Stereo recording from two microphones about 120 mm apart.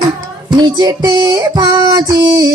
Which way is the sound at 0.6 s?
35° right (ahead or behind).